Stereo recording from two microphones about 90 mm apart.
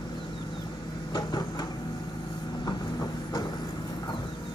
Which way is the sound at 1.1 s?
45° left (ahead or behind).